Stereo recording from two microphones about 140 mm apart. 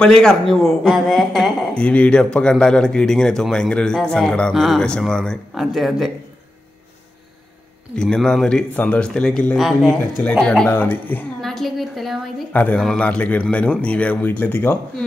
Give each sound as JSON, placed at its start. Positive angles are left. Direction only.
{"t": 0.0, "sound": "speech", "side_deg": 5}
{"t": 7.9, "sound": "speech", "side_deg": 5}
{"t": 10.7, "sound": "a man's voice", "side_deg": 15}
{"t": 11.4, "sound": "a sound", "side_deg": 0}
{"t": 12.5, "sound": "a man's voice", "side_deg": 10}